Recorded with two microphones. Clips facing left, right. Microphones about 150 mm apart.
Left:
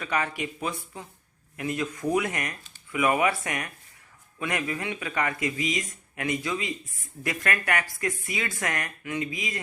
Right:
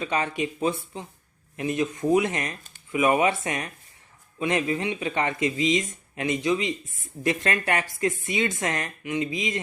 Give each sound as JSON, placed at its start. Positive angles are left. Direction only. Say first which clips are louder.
{"t": 0.0, "sound": "speech", "louder": "right 3 dB", "side_deg": -25}